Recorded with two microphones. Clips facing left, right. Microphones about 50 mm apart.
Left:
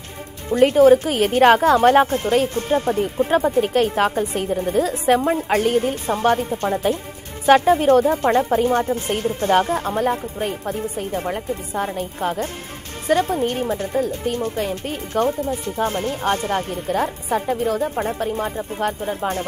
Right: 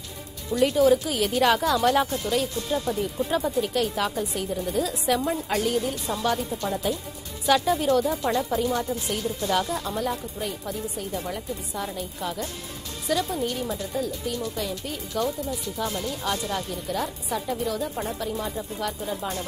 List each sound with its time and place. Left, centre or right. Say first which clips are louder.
0.5 s a woman's voice: left 7 dB; left